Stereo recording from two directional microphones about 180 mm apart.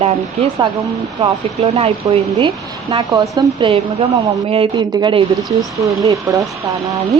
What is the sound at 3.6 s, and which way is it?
Speech, 30° right (ahead or behind).